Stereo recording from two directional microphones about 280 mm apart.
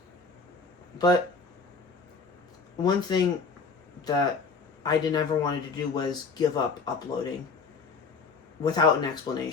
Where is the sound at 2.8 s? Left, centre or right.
Centre.